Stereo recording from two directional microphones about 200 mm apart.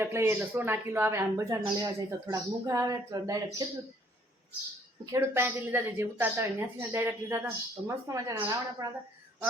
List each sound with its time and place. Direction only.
0.0 s speech: 10° right (ahead or behind)
5.1 s speech: 15° right (ahead or behind)